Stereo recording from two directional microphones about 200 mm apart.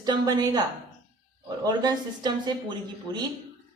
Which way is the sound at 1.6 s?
20° right (ahead or behind).